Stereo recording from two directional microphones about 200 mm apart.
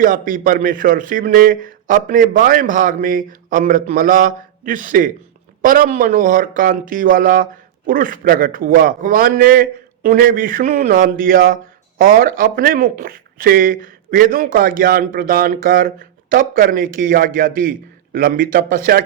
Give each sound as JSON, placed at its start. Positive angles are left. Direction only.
{"t": 0.0, "sound": "a man's voice", "side_deg": -40}